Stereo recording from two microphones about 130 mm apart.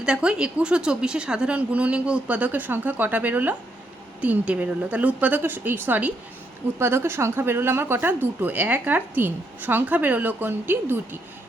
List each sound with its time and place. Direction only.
0.0 s speech: 5° right (ahead or behind)